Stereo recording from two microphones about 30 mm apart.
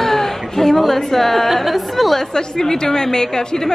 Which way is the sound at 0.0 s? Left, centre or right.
Centre.